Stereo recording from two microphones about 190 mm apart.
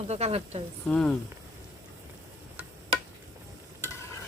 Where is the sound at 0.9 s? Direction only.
5° left (ahead or behind).